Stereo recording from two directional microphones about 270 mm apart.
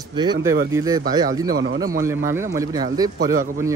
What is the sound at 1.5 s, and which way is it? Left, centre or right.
Speech, right.